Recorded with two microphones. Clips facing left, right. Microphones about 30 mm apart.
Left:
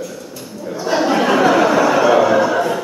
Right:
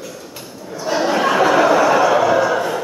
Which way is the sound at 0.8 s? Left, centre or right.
Centre.